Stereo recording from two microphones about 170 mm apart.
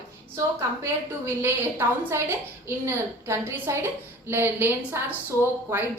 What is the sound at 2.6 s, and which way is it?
A woman's voice, 15° right (ahead or behind).